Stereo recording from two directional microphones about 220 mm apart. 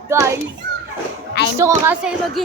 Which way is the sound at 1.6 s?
10° right (ahead or behind).